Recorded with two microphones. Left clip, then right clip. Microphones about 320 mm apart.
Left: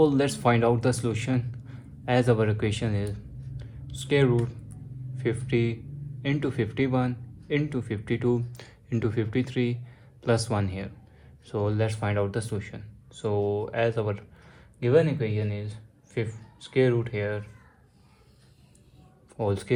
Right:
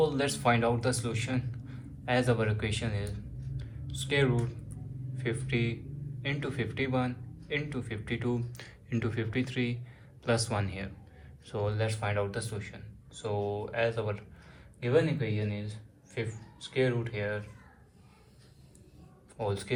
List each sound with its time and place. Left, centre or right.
0.0 s speech: left
19.4 s speech: left